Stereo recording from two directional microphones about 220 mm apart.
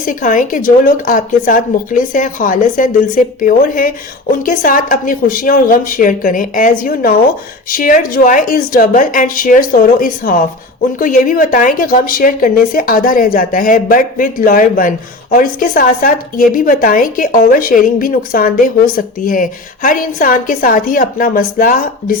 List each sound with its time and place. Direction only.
0.0 s a woman's voice: 35° left (ahead or behind)